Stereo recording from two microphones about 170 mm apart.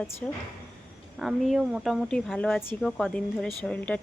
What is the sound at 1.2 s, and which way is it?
Speech, 5° right (ahead or behind).